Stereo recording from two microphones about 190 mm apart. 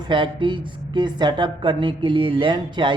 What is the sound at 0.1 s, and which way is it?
A woman's voice, 25° right (ahead or behind).